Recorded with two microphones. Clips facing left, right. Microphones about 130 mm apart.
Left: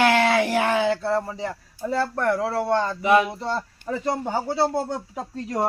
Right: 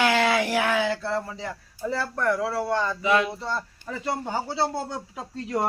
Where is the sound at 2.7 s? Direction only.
50° left (ahead or behind).